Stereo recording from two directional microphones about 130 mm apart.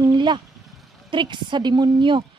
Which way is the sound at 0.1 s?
35° right (ahead or behind).